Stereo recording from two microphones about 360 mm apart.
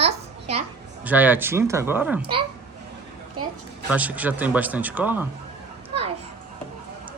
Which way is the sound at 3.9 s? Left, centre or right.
Centre.